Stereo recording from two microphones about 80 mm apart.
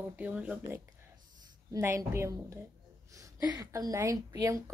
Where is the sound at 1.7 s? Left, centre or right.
Right.